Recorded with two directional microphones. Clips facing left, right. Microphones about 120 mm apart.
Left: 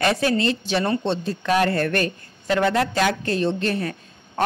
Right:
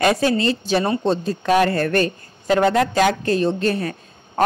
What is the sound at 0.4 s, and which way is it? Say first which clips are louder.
A woman's voice: right 3 dB; 40° right (ahead or behind).